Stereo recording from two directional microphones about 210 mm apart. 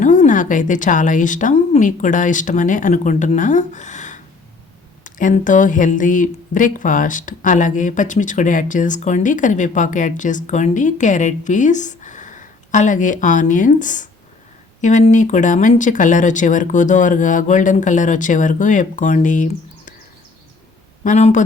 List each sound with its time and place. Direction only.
0.0 s speech: 35° left (ahead or behind)
21.0 s speech: 35° left (ahead or behind)